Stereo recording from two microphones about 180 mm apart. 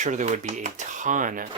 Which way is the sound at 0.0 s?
40° right (ahead or behind).